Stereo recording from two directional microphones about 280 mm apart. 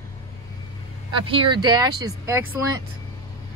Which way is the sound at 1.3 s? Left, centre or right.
Centre.